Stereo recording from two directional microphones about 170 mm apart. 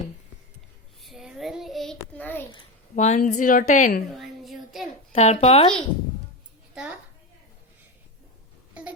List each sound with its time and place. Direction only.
1.0 s child singing: centre (ahead or behind)
2.9 s a woman's voice: 45° left (ahead or behind)
4.1 s child singing: centre (ahead or behind)
5.1 s speech: 40° left (ahead or behind)